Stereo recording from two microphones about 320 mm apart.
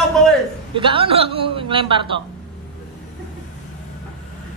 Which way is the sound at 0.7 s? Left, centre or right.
Centre.